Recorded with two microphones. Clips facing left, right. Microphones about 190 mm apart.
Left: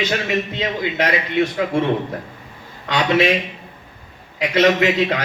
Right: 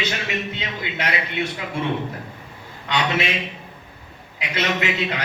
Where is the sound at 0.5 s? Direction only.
40° left (ahead or behind).